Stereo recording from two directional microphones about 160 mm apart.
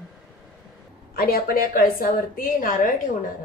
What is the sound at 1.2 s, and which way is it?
A woman's voice, 70° left (ahead or behind).